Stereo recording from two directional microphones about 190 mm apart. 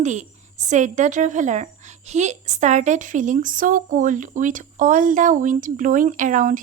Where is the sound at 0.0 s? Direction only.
40° right (ahead or behind).